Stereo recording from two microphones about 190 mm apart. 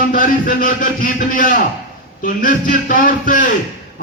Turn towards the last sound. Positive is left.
turn(degrees=45)  # may be behind; listen again after turning